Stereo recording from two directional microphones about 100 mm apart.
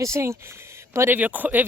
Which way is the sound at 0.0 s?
30° right (ahead or behind).